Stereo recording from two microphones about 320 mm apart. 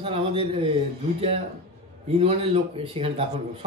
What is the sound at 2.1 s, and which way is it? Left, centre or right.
A man's voice, centre.